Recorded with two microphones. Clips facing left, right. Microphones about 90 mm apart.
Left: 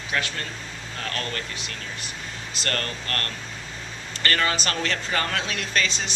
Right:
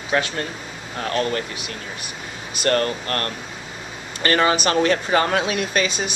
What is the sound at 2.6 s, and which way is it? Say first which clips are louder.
Speech: right 10 dB; 20° right (ahead or behind).